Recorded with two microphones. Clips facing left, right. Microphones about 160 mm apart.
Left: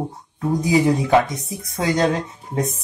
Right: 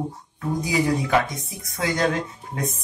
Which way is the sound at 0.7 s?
25° left (ahead or behind).